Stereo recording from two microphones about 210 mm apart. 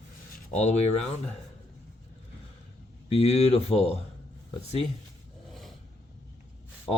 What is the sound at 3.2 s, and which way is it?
Speech, 30° left (ahead or behind).